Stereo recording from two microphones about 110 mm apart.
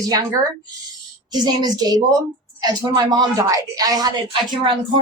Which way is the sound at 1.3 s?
40° right (ahead or behind).